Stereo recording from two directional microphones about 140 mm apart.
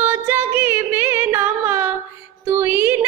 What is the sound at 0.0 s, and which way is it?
Music, 15° right (ahead or behind).